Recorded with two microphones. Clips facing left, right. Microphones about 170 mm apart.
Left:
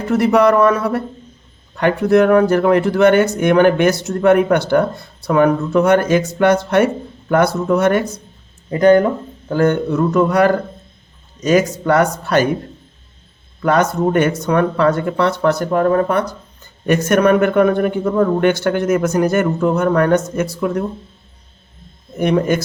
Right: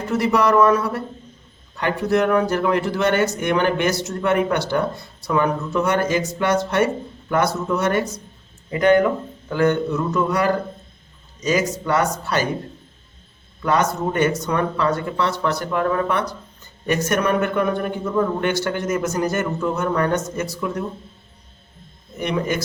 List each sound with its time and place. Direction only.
0.1 s speech: 55° left (ahead or behind)
8.7 s speech: 35° left (ahead or behind); by 12.5 s 55° left (ahead or behind)
13.6 s speech: 55° left (ahead or behind)
16.8 s speech: 55° left (ahead or behind)
22.2 s a man's voice: 50° left (ahead or behind)